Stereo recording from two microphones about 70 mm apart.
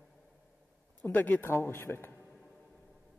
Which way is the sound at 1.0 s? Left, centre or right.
Left.